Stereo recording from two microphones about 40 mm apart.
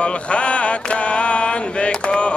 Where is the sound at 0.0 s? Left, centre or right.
Left.